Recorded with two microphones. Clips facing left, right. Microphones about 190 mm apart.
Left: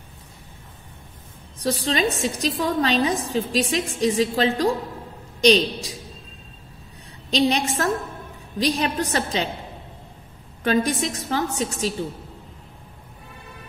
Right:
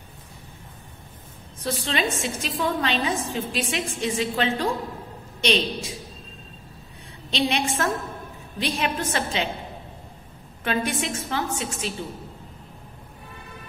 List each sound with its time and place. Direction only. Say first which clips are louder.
1.6 s a woman's voice: left 4 dB; 35° left (ahead or behind)
7.2 s a woman's voice: left 4 dB; 40° left (ahead or behind)
10.6 s a woman's voice: left 5 dB; 40° left (ahead or behind)